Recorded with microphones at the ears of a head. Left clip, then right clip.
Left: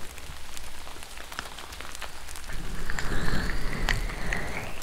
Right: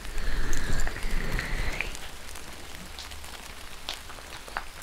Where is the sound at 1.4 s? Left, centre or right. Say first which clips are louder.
Right 9 dB; right.